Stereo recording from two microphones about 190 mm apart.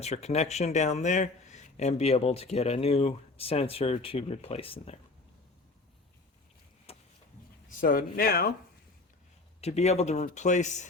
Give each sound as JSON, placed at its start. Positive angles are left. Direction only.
{"t": 0.0, "sound": "speech", "side_deg": 35}
{"t": 6.9, "sound": "a sound", "side_deg": 30}
{"t": 7.7, "sound": "speech", "side_deg": 45}
{"t": 9.6, "sound": "speech", "side_deg": 35}